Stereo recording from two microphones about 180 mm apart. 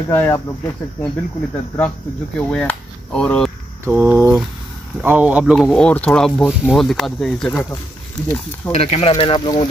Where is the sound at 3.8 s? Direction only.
5° right (ahead or behind).